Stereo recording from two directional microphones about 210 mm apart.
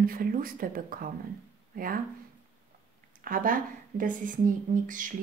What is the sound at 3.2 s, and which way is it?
Speech, 40° right (ahead or behind).